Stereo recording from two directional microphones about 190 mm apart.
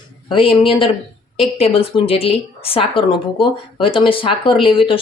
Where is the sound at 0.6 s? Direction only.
25° left (ahead or behind).